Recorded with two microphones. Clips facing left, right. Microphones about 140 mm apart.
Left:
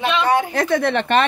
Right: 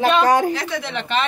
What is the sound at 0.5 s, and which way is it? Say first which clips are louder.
Speech: left 7 dB; 55° left (ahead or behind).